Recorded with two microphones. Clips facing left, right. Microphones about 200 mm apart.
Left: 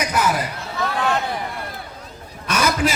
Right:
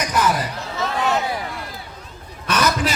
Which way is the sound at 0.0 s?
10° left (ahead or behind).